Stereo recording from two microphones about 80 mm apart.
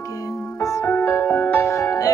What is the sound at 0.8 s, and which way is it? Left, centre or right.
Music, left.